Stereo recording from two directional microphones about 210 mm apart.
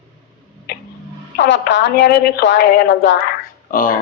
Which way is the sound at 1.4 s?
60° left (ahead or behind).